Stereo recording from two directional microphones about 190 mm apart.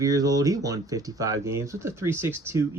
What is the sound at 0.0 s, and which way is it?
Speech, 20° right (ahead or behind).